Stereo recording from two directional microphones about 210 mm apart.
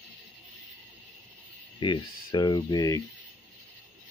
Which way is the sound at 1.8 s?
25° left (ahead or behind).